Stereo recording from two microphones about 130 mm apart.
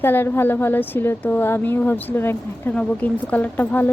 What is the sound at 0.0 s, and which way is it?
Speech, 15° left (ahead or behind).